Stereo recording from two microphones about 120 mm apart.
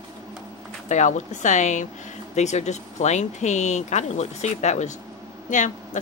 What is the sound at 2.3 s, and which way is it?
Speech, 70° left (ahead or behind).